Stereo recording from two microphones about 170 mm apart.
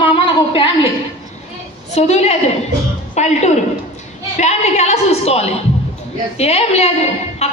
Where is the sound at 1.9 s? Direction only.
40° left (ahead or behind).